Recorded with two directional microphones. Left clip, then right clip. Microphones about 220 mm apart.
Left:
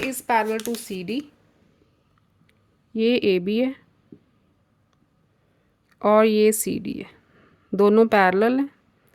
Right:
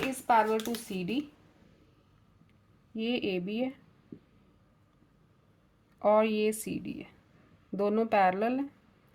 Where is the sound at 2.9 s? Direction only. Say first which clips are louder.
Left 12 dB; 45° left (ahead or behind).